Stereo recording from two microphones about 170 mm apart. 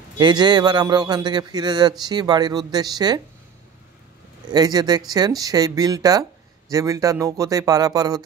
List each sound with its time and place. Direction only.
0.2 s speech: 25° right (ahead or behind)
4.5 s speech: 25° right (ahead or behind)